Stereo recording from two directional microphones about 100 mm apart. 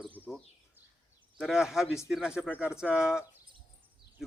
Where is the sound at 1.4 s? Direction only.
5° right (ahead or behind).